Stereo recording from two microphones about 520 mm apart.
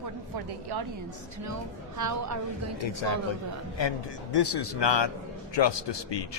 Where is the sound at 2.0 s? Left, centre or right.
Right.